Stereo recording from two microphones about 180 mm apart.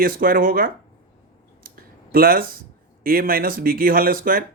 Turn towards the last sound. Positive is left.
turn(degrees=-50)  # may be behind; listen again after turning